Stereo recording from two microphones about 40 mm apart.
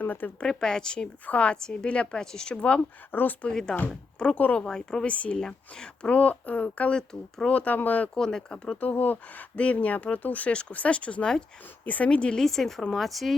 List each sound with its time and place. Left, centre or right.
0.0 s speech: left
0.4 s speech: centre
1.3 s speech: left
3.1 s speech: left
3.5 s speech: centre
5.0 s speech: left
5.4 s speech: centre
6.1 s speech: left
6.9 s speech: centre
7.4 s speech: left
8.1 s speech: centre
8.8 s speech: left
12.1 s speech: left
12.4 s speech: centre